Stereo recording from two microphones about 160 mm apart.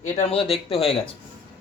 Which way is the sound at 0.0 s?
45° left (ahead or behind).